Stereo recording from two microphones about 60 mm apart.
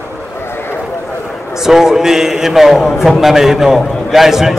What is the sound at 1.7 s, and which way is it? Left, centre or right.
A man's voice, centre.